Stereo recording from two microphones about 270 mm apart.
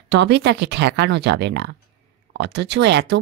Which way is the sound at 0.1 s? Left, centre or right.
Right.